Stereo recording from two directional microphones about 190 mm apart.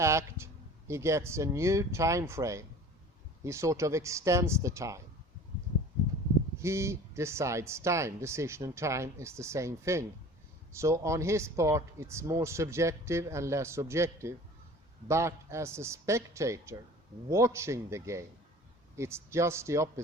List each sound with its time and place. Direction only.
0.0 s speech: 15° right (ahead or behind)
6.6 s speech: 15° right (ahead or behind)